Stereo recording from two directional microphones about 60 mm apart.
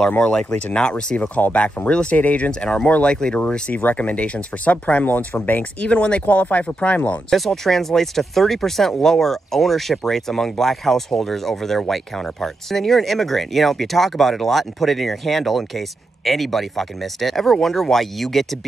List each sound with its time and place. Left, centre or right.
0.3 s speech: centre
3.7 s speech: left
7.2 s speech: centre